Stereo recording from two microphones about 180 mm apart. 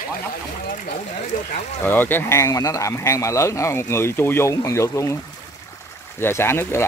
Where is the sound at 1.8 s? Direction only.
10° left (ahead or behind).